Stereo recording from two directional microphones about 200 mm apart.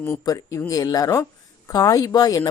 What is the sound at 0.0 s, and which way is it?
Speech, 15° left (ahead or behind).